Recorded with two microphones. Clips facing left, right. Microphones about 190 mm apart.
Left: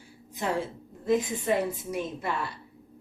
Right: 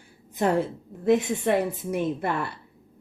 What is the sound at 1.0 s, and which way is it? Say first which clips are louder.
Speech: right 5 dB; 70° right (ahead or behind).